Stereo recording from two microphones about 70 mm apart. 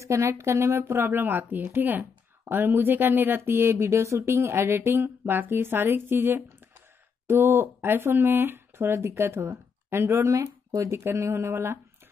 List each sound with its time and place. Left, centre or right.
0.0 s speech: right
11.1 s speech: right